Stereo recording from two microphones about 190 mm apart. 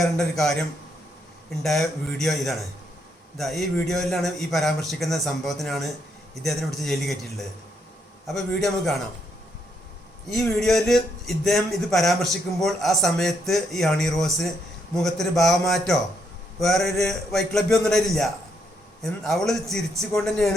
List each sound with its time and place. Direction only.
0.0 s a man's voice: centre (ahead or behind)
10.2 s a man's voice: centre (ahead or behind)